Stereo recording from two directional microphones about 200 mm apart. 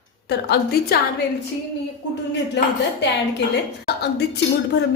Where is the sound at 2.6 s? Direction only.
55° left (ahead or behind).